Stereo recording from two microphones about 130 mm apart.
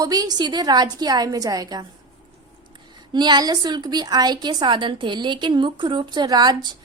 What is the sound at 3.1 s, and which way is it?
A woman's voice, 35° right (ahead or behind).